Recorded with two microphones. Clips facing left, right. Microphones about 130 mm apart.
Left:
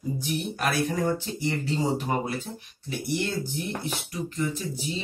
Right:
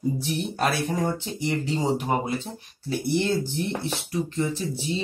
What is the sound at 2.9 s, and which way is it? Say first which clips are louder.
Speech: right 5 dB; 35° right (ahead or behind).